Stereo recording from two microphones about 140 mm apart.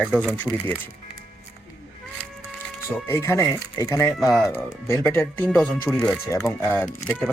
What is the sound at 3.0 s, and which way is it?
Speech, 20° left (ahead or behind).